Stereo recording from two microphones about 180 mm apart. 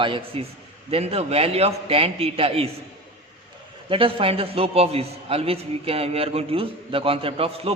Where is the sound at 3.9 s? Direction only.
30° right (ahead or behind).